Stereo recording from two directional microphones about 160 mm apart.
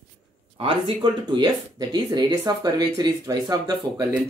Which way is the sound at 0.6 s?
35° right (ahead or behind).